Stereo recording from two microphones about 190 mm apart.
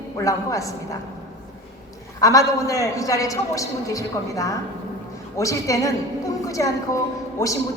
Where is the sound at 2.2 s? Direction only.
15° left (ahead or behind).